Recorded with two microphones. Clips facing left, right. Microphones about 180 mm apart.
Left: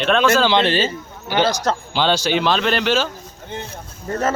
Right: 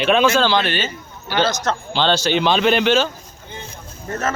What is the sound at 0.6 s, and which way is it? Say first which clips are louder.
Speech: left 4 dB; 30° left (ahead or behind).